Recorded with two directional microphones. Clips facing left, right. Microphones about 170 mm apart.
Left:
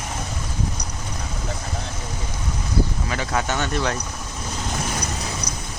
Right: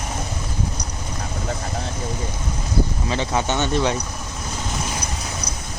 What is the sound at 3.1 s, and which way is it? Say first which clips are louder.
Speech: right 2 dB; 25° right (ahead or behind).